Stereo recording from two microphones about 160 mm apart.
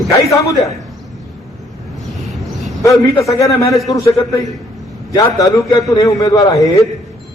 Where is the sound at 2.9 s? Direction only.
20° left (ahead or behind).